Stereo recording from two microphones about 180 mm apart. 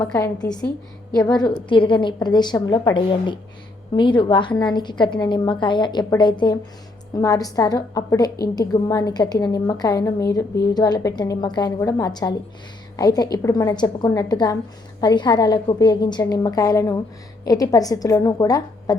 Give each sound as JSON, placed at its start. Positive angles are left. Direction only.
{"t": 0.0, "sound": "a woman's voice", "side_deg": 20}